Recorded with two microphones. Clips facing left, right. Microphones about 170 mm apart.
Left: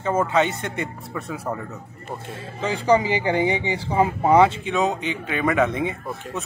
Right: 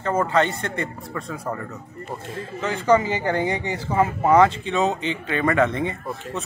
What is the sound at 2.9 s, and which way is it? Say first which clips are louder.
Speech: even; 10° left (ahead or behind).